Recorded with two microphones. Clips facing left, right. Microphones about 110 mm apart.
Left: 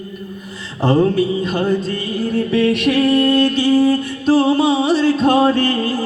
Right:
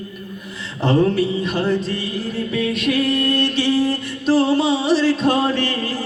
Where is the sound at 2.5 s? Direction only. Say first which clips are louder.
Left 4 dB; 65° left (ahead or behind).